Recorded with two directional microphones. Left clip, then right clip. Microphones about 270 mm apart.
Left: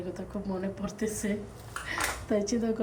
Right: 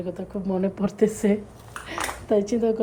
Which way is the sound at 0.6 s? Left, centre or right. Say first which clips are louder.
Right 15 dB; centre.